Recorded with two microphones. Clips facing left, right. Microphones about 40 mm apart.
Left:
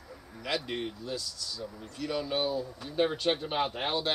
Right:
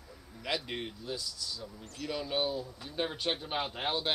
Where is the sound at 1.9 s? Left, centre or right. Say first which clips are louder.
Left 2 dB; centre.